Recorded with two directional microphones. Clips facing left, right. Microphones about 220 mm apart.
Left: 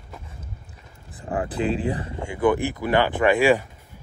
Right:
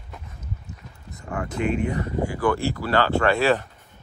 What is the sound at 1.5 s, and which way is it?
Speech, 35° left (ahead or behind).